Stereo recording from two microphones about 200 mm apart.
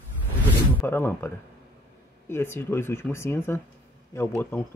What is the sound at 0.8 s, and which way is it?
Speech, 10° left (ahead or behind).